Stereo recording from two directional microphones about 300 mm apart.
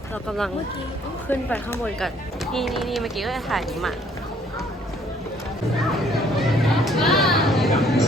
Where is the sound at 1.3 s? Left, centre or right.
Centre.